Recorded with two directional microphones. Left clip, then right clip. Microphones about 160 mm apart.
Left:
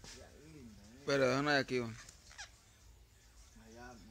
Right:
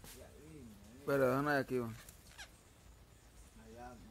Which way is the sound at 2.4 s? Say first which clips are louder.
Left 2 dB; 35° right (ahead or behind).